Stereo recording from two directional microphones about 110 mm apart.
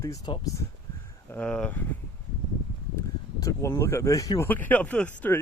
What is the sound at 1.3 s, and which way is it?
Speech, 15° left (ahead or behind).